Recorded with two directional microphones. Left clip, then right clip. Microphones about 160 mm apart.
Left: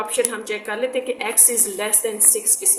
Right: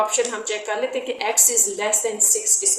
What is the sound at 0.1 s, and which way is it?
A woman's voice, 25° left (ahead or behind).